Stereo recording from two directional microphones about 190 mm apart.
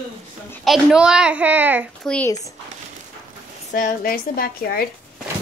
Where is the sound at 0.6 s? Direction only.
Centre (ahead or behind).